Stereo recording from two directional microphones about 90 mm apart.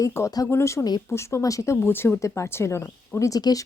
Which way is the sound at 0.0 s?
35° left (ahead or behind).